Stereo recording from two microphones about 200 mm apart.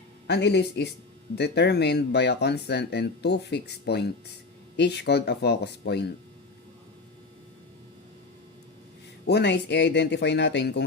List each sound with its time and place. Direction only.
0.3 s speech: 55° left (ahead or behind)
9.2 s speech: 55° left (ahead or behind)